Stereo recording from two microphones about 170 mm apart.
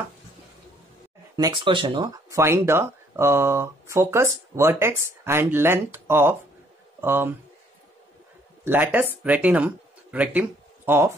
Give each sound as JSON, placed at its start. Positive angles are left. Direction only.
{"t": 1.3, "sound": "speech", "side_deg": -25}
{"t": 8.6, "sound": "speech", "side_deg": -10}